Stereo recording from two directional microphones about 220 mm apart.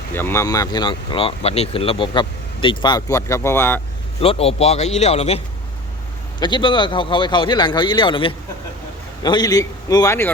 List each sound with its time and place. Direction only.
0.1 s speech: 10° left (ahead or behind)
4.2 s speech: 25° left (ahead or behind)
6.4 s a man's voice: 20° left (ahead or behind)